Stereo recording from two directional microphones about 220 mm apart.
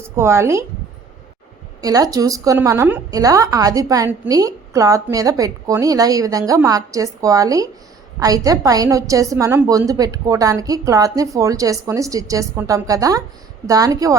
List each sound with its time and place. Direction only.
0.2 s a woman's voice: 10° right (ahead or behind)
1.8 s a woman's voice: 15° right (ahead or behind)